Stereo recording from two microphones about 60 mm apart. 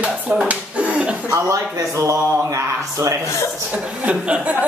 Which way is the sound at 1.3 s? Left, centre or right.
Right.